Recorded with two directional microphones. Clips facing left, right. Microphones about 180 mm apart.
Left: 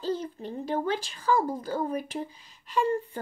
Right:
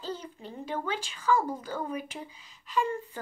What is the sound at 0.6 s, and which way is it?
A child's voice, 40° left (ahead or behind).